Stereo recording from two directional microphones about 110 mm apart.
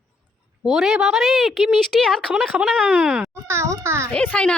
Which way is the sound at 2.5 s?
10° right (ahead or behind).